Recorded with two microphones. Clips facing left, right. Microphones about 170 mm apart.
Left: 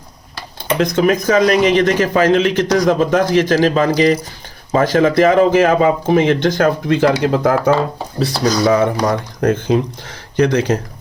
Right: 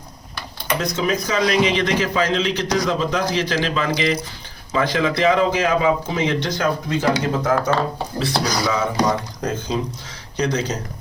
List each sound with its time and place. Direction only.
0.8 s a man's voice: 60° left (ahead or behind)